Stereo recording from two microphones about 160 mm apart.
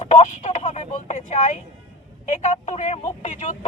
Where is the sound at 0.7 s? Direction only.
50° left (ahead or behind).